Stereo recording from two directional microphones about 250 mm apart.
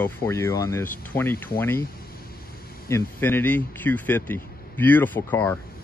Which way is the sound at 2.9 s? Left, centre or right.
Centre.